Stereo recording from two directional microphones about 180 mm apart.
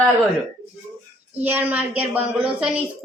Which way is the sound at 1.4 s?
10° right (ahead or behind).